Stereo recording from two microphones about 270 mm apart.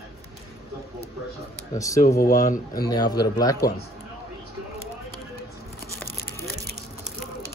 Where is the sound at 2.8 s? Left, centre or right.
Centre.